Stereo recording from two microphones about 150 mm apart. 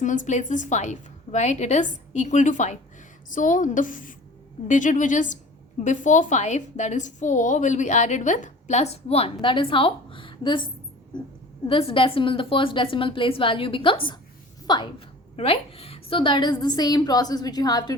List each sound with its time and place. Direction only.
0.0 s a woman's voice: 55° left (ahead or behind); by 10.7 s 35° left (ahead or behind)
11.7 s a woman's voice: 35° left (ahead or behind)